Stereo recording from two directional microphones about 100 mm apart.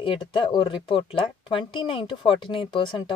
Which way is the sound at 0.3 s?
60° left (ahead or behind).